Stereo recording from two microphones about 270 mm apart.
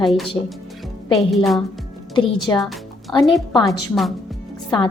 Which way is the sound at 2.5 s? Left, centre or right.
Centre.